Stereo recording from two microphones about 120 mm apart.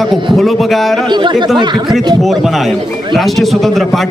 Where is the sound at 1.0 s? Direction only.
40° right (ahead or behind).